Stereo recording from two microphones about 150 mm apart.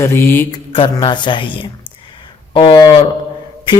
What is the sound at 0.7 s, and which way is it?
Speech, 35° left (ahead or behind).